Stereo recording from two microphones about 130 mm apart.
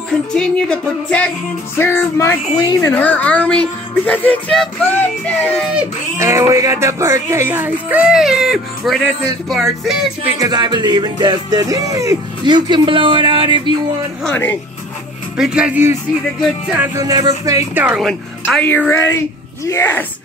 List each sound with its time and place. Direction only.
0.3 s speech: 5° left (ahead or behind)
1.8 s music: 15° left (ahead or behind)
2.9 s speech: 10° left (ahead or behind)
6.1 s speech: 20° right (ahead or behind); by 9.0 s centre (ahead or behind)
9.5 s music: centre (ahead or behind)
10.4 s music: 30° right (ahead or behind)
14.2 s speech: 15° left (ahead or behind)
15.3 s speech: 5° right (ahead or behind)
17.0 s speech: 30° right (ahead or behind)
17.7 s speech: 10° right (ahead or behind)
18.9 s music: 20° left (ahead or behind)
19.6 s speech: 20° left (ahead or behind)